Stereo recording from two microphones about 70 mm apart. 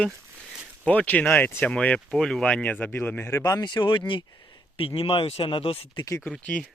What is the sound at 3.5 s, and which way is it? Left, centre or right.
Speech, left.